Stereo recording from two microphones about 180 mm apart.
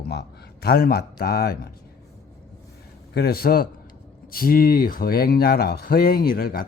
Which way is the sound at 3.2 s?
60° left (ahead or behind).